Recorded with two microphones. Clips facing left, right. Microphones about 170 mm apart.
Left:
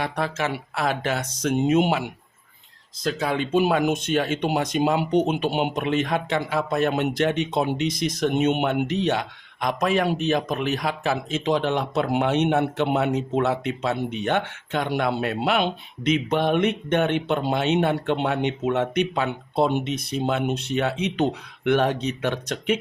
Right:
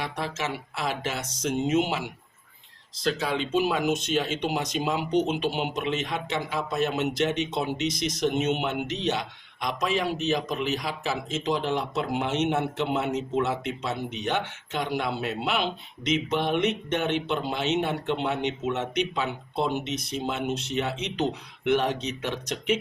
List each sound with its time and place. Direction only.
0.0 s speech: 55° left (ahead or behind)